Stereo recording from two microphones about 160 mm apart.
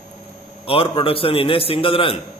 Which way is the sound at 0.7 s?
35° left (ahead or behind).